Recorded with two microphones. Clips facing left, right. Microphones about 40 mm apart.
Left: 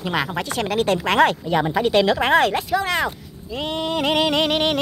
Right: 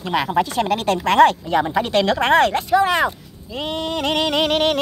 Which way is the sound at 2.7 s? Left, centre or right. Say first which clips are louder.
Right 5 dB; centre.